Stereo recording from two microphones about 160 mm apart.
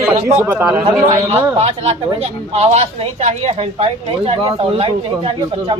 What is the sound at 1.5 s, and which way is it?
A woman's voice, 40° right (ahead or behind).